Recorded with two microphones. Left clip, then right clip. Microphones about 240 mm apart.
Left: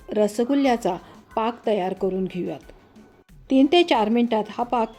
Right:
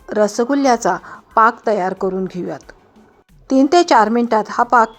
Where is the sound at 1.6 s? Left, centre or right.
Right.